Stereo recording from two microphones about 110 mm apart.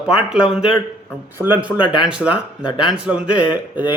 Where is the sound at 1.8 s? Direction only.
45° left (ahead or behind).